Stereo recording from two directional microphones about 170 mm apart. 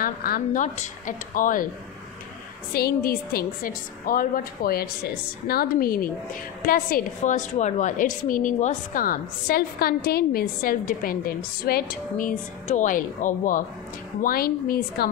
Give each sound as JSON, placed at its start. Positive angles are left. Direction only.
{"t": 0.0, "sound": "speech", "side_deg": 60}
{"t": 2.7, "sound": "a woman's voice", "side_deg": 60}